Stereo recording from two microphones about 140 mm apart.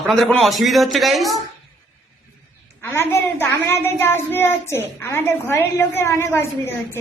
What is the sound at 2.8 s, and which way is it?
A child's voice, 15° left (ahead or behind).